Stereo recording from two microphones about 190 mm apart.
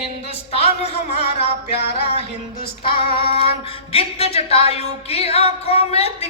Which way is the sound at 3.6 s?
30° left (ahead or behind).